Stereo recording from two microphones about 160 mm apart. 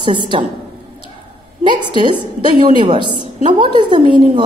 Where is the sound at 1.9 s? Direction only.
30° right (ahead or behind).